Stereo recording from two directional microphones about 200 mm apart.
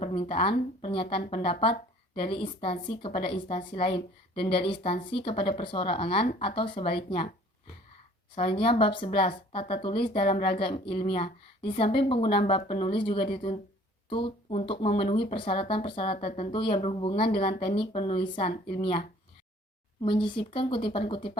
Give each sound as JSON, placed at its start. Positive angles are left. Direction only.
{"t": 0.0, "sound": "speech", "side_deg": 25}
{"t": 8.4, "sound": "speech", "side_deg": 25}